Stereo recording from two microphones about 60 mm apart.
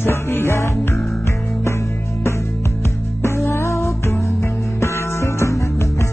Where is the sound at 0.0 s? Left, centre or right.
Left.